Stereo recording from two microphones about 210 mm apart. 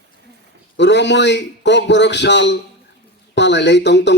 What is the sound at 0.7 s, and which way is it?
A man's voice, 55° left (ahead or behind).